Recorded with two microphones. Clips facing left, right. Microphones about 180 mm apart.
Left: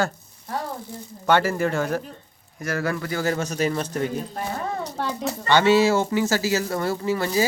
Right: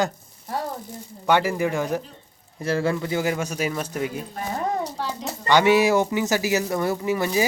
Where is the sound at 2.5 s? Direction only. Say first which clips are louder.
Right 3 dB; 25° right (ahead or behind); by 4.1 s 10° right (ahead or behind).